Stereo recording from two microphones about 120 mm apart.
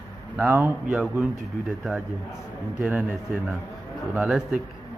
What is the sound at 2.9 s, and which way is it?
Speech, 10° right (ahead or behind).